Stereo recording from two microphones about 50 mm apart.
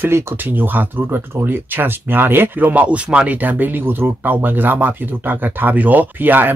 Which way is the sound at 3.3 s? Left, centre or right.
Right.